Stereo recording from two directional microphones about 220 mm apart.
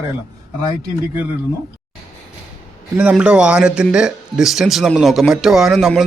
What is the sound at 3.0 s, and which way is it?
A man's voice, 5° right (ahead or behind).